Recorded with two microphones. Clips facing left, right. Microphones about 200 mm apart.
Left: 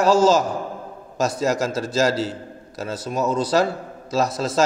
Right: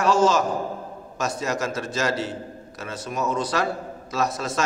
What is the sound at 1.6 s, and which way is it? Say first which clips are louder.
A man's voice: left 5 dB; 30° left (ahead or behind).